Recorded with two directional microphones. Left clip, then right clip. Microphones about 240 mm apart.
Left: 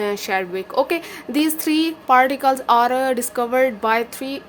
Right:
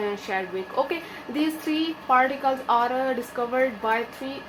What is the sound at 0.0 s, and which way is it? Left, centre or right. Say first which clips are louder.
A woman's voice: left 6 dB; left.